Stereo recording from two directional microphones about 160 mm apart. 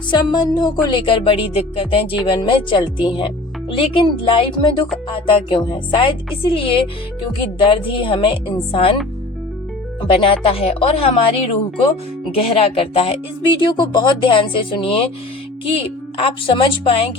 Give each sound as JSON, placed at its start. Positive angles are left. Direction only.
{"t": 0.1, "sound": "music", "side_deg": 25}
{"t": 10.0, "sound": "music", "side_deg": 35}
{"t": 16.1, "sound": "music", "side_deg": 30}